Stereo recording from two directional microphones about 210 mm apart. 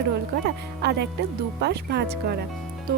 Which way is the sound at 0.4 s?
50° right (ahead or behind).